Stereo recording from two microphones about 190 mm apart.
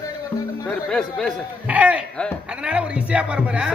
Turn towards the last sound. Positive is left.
turn(degrees=-5)  # may be behind; listen again after turning